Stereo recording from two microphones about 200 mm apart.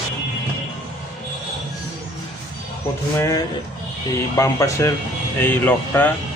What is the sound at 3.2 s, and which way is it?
Speech, 15° left (ahead or behind).